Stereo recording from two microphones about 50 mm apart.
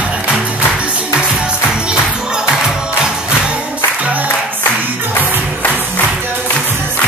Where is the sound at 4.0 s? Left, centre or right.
Right.